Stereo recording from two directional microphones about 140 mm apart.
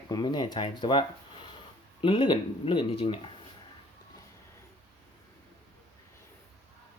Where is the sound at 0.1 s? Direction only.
30° left (ahead or behind).